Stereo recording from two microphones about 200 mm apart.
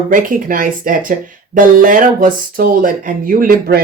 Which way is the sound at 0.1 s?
45° right (ahead or behind).